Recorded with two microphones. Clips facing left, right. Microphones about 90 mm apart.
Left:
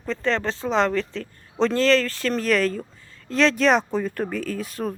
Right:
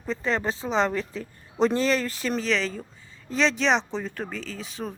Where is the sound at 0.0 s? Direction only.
5° right (ahead or behind).